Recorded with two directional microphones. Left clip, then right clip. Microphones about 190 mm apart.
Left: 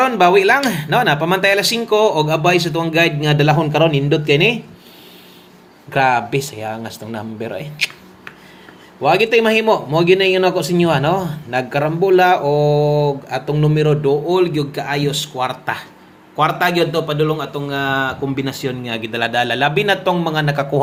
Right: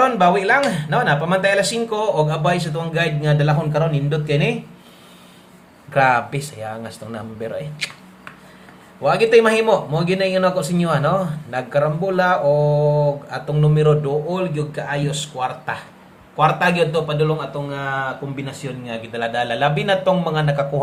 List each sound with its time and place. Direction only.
0.0 s speech: 30° left (ahead or behind)
5.9 s speech: 20° left (ahead or behind)